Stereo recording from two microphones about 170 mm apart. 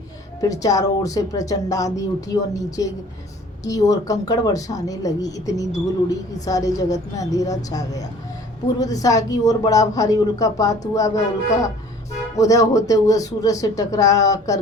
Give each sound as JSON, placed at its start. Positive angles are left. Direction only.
{"t": 0.4, "sound": "speech", "side_deg": 20}